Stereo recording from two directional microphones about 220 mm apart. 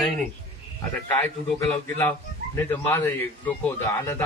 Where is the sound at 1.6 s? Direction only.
10° left (ahead or behind).